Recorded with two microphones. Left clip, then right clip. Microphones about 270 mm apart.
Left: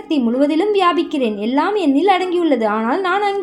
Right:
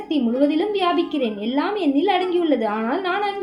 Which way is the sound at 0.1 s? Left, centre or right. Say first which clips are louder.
Left 3 dB; left.